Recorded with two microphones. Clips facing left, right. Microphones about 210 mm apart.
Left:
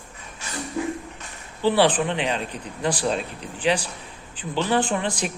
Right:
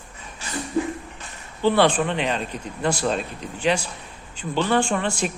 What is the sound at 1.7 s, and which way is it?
Speech, 15° left (ahead or behind).